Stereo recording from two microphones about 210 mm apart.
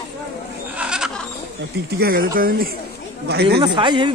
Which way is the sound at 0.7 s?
5° right (ahead or behind).